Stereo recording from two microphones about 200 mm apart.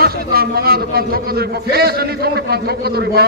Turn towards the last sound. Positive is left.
turn(degrees=-50)  # may be behind; listen again after turning